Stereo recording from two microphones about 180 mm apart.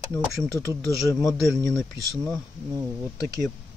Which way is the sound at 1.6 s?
5° left (ahead or behind).